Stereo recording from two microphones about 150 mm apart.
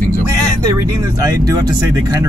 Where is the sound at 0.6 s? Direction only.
25° right (ahead or behind).